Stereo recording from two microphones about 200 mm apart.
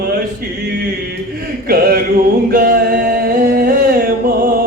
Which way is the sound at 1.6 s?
45° right (ahead or behind).